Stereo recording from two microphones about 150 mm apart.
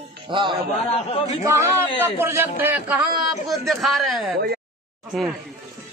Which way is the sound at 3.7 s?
Centre (ahead or behind).